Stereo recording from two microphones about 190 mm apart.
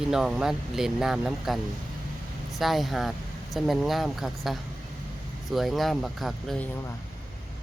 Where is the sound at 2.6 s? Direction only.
Centre (ahead or behind).